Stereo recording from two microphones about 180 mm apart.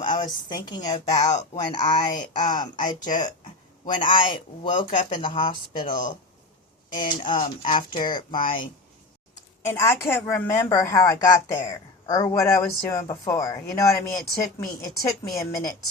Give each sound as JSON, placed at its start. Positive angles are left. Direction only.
{"t": 0.0, "sound": "speech", "side_deg": 25}
{"t": 2.7, "sound": "speech", "side_deg": 45}
{"t": 3.8, "sound": "speech", "side_deg": 25}
{"t": 4.7, "sound": "speech", "side_deg": 45}
{"t": 5.0, "sound": "speech", "side_deg": 25}
{"t": 7.2, "sound": "speech", "side_deg": 30}
{"t": 9.6, "sound": "a woman's voice", "side_deg": 15}